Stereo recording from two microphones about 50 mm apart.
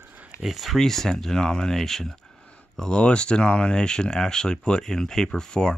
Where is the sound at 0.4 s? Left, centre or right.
Centre.